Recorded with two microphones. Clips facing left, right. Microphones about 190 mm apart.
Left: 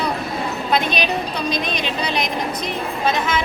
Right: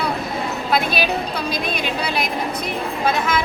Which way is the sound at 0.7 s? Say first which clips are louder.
Even; 5° right (ahead or behind).